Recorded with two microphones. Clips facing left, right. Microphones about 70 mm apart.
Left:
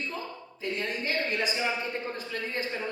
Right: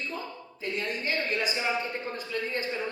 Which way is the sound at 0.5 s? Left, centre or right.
Left.